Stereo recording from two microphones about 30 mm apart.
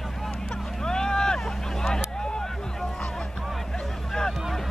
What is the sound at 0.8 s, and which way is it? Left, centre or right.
Vehicle, left.